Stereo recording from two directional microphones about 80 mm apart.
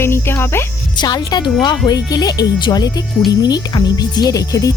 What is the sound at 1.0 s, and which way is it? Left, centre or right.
Speech, left.